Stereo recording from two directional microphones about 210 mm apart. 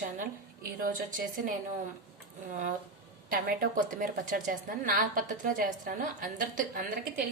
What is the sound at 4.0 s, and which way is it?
A woman's voice, 40° right (ahead or behind).